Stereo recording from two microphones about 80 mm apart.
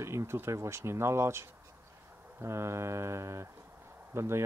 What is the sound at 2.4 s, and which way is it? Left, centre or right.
Speech, right.